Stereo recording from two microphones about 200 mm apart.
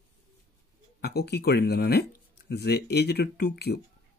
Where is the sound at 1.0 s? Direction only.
55° left (ahead or behind).